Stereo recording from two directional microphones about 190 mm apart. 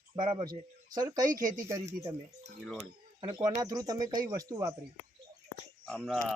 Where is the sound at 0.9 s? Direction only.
20° right (ahead or behind).